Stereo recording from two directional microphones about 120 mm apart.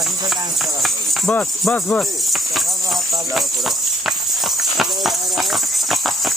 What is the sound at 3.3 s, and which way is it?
Music, centre (ahead or behind).